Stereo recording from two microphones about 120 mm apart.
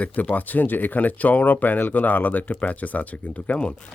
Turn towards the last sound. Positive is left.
turn(degrees=10)  # may be behind; listen again after turning